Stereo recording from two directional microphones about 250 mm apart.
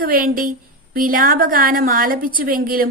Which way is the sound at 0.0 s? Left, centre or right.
Right.